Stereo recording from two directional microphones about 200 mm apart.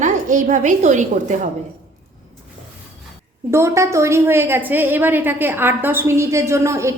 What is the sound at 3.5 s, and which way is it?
A woman's voice, 15° right (ahead or behind).